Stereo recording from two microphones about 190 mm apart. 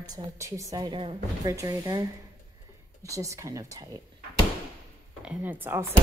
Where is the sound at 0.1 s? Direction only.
15° right (ahead or behind).